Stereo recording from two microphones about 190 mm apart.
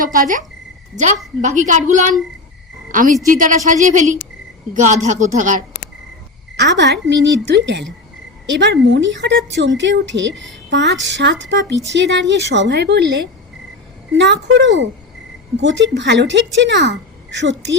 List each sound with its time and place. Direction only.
0.0 s a woman's voice: 45° right (ahead or behind)
3.2 s a woman's voice: 45° right (ahead or behind)
6.6 s a woman's voice: 65° right (ahead or behind)